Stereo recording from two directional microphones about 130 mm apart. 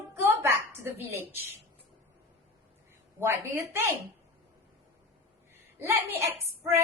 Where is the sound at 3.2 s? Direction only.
20° right (ahead or behind).